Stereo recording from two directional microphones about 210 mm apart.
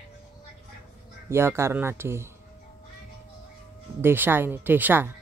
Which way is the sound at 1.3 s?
10° right (ahead or behind).